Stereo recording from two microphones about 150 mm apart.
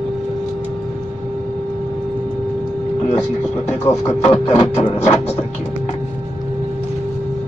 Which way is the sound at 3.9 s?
15° left (ahead or behind).